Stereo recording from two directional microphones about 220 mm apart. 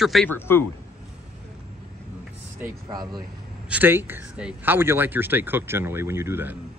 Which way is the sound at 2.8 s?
20° right (ahead or behind).